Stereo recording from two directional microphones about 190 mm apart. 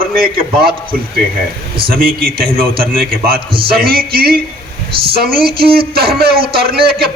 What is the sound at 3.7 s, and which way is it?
Speech, 50° right (ahead or behind).